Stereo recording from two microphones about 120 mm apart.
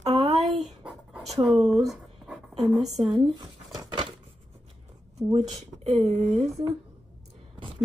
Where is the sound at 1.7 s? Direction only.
5° right (ahead or behind).